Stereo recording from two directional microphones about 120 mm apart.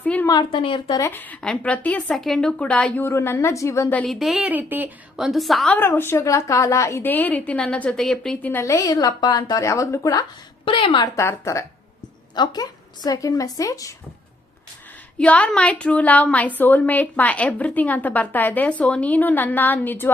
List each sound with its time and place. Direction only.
0.0 s a sound: 15° left (ahead or behind)
0.3 s a woman's voice: 40° left (ahead or behind)
0.9 s a woman's voice: 20° left (ahead or behind)
3.9 s a woman's voice: centre (ahead or behind); by 5.2 s 15° right (ahead or behind)
5.2 s a woman's voice: centre (ahead or behind)
5.7 s a woman's voice: 20° left (ahead or behind)
8.6 s speech: 25° left (ahead or behind)
10.7 s a woman's voice: 45° left (ahead or behind)
11.0 s speech: 25° left (ahead or behind)
12.3 s speech: 35° left (ahead or behind)
15.2 s a woman's voice: 10° left (ahead or behind)